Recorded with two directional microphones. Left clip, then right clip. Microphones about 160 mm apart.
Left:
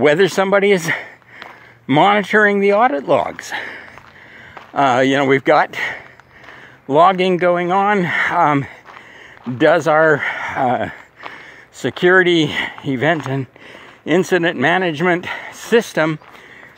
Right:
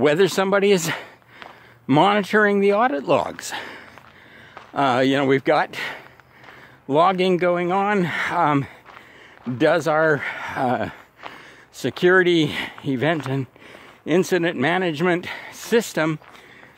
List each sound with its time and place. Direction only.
0.0 s speech: 20° right (ahead or behind)